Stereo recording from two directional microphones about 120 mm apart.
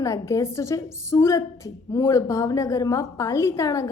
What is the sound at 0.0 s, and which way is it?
A woman's voice, 25° left (ahead or behind).